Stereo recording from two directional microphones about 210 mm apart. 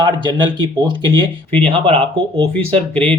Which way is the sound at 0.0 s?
20° right (ahead or behind).